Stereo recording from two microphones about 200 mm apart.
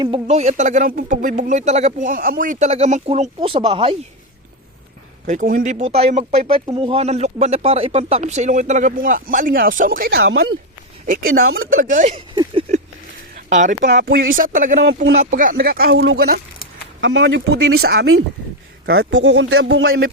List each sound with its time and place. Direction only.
0.0 s speech: 30° right (ahead or behind)
5.2 s speech: 40° right (ahead or behind)
10.2 s speech: 80° right
11.0 s speech: 45° right (ahead or behind)
12.3 s a sound: 20° right (ahead or behind)
13.3 s speech: 40° right (ahead or behind)
13.9 s speech: 50° right (ahead or behind)
17.0 s speech: 65° right (ahead or behind)